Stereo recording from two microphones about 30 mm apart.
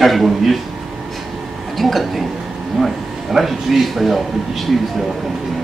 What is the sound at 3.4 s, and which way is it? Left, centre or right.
Speech, centre.